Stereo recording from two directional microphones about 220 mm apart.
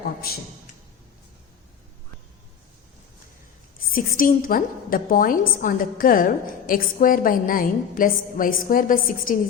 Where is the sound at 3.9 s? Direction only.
40° left (ahead or behind).